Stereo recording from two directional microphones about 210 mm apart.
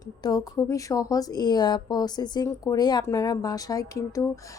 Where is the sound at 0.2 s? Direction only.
15° left (ahead or behind).